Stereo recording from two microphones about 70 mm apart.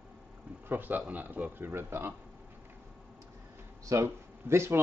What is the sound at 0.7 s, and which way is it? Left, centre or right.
Speech, right.